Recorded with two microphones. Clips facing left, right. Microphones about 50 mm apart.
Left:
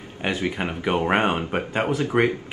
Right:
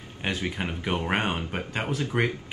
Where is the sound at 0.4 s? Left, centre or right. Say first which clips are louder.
Left 5 dB; left.